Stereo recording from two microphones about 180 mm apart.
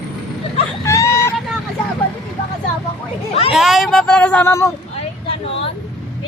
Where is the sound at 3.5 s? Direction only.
Centre (ahead or behind); by 4.7 s 15° left (ahead or behind).